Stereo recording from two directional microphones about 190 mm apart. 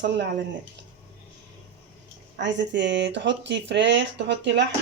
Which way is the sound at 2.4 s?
70° right (ahead or behind).